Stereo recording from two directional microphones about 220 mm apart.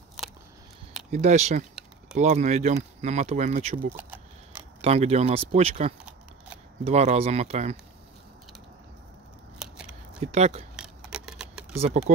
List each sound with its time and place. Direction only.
1.1 s speech: 30° right (ahead or behind)
3.9 s a sound: 10° right (ahead or behind)
4.8 s speech: 30° right (ahead or behind)
9.6 s scissors: 5° right (ahead or behind)
10.2 s speech: 30° right (ahead or behind)
10.8 s keys jangling: 5° right (ahead or behind)